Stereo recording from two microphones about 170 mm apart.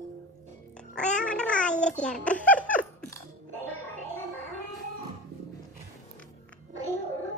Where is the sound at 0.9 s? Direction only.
5° left (ahead or behind).